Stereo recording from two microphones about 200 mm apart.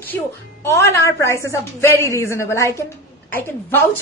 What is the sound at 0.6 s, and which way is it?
A woman's voice, 15° left (ahead or behind).